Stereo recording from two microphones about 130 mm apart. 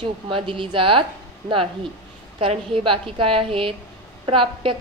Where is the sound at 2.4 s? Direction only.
40° right (ahead or behind).